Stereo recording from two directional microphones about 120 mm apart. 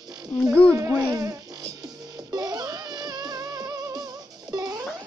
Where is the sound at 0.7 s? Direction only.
30° right (ahead or behind).